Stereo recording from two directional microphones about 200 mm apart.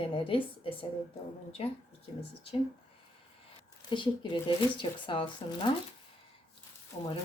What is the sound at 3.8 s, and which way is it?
Speech, 25° left (ahead or behind).